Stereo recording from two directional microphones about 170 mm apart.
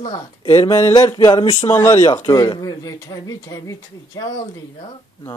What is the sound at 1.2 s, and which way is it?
Speech, 30° left (ahead or behind).